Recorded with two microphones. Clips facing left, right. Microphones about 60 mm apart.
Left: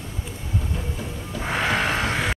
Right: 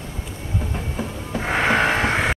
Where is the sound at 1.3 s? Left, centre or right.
Right.